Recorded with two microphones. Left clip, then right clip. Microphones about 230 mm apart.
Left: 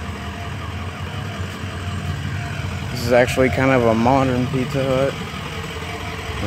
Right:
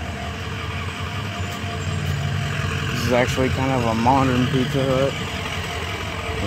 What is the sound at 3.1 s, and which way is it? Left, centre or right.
Speech, centre.